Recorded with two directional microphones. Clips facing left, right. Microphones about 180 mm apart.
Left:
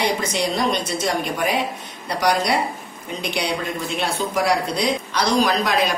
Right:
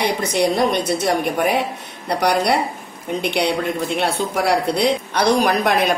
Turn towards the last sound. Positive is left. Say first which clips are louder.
# right 3 dB
turn(degrees=-65)  # may be behind; listen again after turning